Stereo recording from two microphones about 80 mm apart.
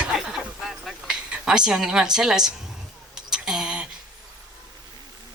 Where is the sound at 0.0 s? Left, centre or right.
Centre.